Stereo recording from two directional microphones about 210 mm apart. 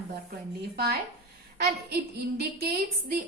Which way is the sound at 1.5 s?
50° right (ahead or behind).